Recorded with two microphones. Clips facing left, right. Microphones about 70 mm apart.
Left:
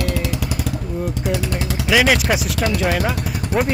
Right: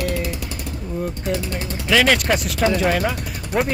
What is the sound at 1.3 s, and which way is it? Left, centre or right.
Speech, left.